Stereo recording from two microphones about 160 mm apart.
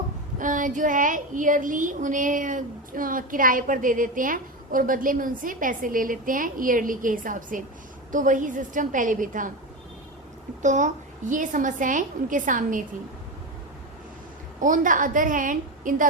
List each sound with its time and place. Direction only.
0.3 s a woman's voice: 55° right (ahead or behind)
10.6 s a woman's voice: 50° right (ahead or behind)
14.6 s speech: 55° right (ahead or behind)